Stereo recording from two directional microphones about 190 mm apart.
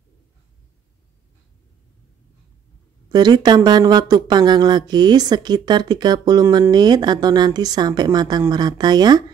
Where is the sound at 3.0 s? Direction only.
20° right (ahead or behind).